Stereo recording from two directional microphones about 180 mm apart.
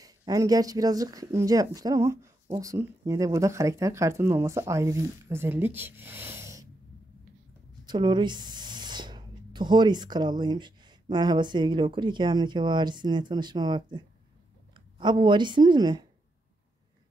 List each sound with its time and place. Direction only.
0.3 s speech: 20° right (ahead or behind)
7.8 s speech: 25° right (ahead or behind)